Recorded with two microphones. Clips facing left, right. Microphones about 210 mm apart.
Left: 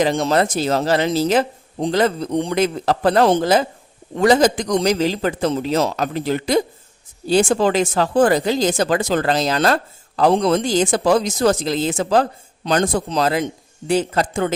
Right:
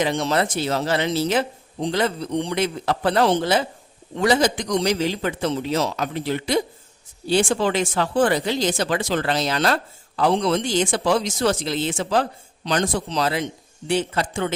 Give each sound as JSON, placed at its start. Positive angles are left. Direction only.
{"t": 0.0, "sound": "speech", "side_deg": 45}